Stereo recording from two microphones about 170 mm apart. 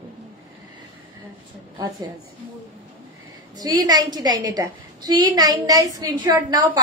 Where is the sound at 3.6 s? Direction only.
20° right (ahead or behind).